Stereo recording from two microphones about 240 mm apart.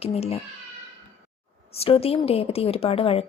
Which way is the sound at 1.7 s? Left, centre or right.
Left.